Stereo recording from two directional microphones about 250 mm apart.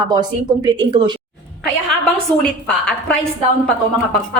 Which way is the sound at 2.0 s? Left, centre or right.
Centre.